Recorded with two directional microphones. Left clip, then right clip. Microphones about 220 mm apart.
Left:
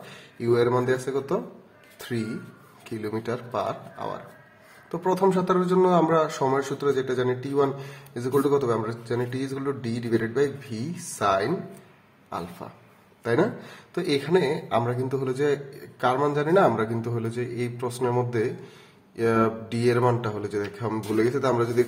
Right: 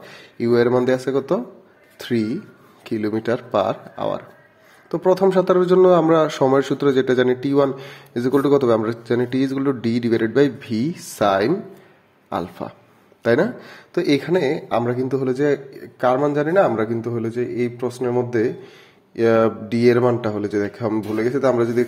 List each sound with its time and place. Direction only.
0.1 s a man's voice: 25° right (ahead or behind)